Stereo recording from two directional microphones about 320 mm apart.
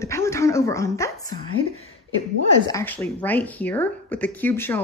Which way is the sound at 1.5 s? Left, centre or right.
Left.